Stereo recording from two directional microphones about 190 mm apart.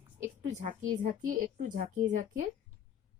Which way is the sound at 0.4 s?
40° right (ahead or behind).